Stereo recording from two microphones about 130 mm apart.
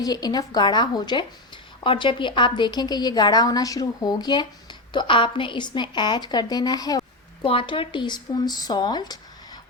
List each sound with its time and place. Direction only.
0.0 s a woman's voice: 30° left (ahead or behind)
7.4 s a woman's voice: 45° left (ahead or behind)